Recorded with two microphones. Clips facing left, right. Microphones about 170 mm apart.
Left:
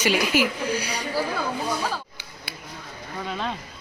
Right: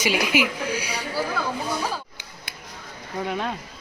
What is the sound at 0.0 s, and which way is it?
Speech, 10° right (ahead or behind).